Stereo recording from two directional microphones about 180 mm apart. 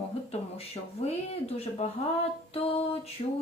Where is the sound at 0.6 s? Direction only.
35° left (ahead or behind).